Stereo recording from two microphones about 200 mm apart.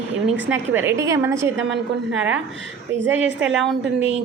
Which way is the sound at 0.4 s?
10° right (ahead or behind).